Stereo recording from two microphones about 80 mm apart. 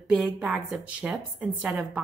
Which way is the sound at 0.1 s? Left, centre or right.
Centre.